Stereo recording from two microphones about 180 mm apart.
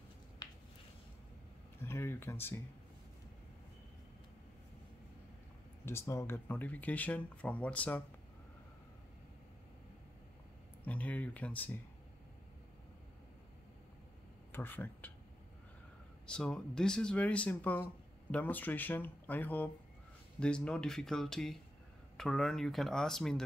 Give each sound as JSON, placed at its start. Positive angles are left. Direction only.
{"t": 0.4, "sound": "a sound", "side_deg": 25}
{"t": 1.8, "sound": "speech", "side_deg": 15}
{"t": 5.9, "sound": "speech", "side_deg": 15}
{"t": 10.9, "sound": "speech", "side_deg": 10}
{"t": 14.5, "sound": "speech", "side_deg": 10}
{"t": 16.3, "sound": "speech", "side_deg": 5}